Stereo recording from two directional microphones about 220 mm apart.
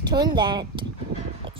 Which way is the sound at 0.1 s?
20° right (ahead or behind).